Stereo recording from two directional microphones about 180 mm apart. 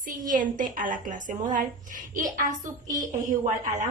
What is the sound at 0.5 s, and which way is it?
A woman's voice, 50° right (ahead or behind).